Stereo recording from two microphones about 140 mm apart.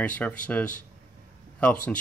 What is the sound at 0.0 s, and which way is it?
Speech, 10° left (ahead or behind).